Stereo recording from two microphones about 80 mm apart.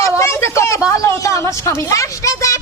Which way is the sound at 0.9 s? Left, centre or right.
Left.